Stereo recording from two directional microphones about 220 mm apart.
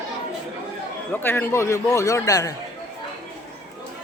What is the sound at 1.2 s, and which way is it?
A man's voice, 10° left (ahead or behind).